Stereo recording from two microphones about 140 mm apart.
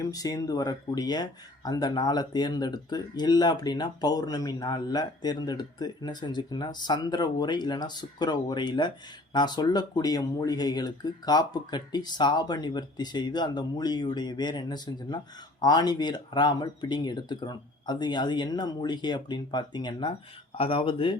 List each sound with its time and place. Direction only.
0.0 s speech: 25° left (ahead or behind)